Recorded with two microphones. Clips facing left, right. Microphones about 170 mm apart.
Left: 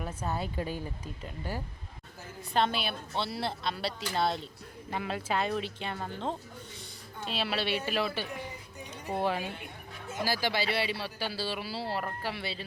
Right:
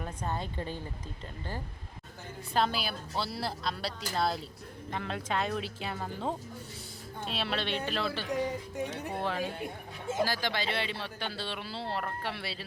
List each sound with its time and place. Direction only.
0.0 s speech: 5° left (ahead or behind)
2.5 s a man's voice: centre (ahead or behind)
8.3 s speech: 90° right
9.6 s speech: 30° right (ahead or behind)
10.2 s a man's voice: 10° left (ahead or behind)